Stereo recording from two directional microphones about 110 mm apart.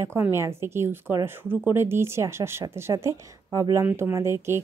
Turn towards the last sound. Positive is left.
turn(degrees=-25)  # may be behind; listen again after turning